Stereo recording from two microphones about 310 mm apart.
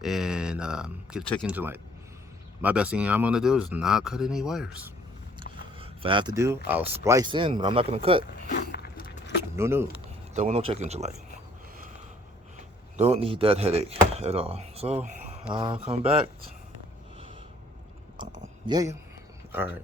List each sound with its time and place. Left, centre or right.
0.0 s speech: centre
5.4 s a sound: centre
6.7 s speech: centre
8.4 s vehicle: left
9.4 s speech: centre
10.3 s speech: right
13.0 s speech: centre
18.2 s a sound: centre